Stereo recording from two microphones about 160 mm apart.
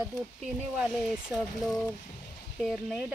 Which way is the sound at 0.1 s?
Centre (ahead or behind).